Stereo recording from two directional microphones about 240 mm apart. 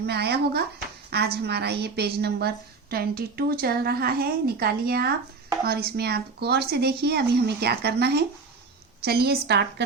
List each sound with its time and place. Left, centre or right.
0.0 s a woman's voice: right